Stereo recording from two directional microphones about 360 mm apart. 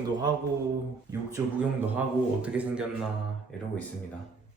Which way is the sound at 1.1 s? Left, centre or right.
Centre.